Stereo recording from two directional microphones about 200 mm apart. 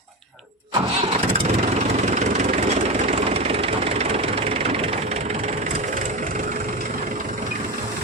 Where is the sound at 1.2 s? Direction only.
30° right (ahead or behind).